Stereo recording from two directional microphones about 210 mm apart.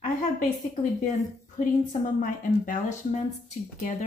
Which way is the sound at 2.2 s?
40° left (ahead or behind).